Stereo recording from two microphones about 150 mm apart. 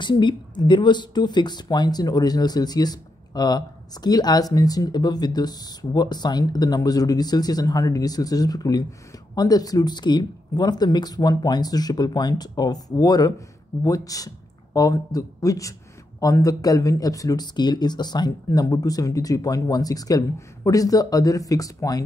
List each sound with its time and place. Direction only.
0.0 s speech: 30° left (ahead or behind)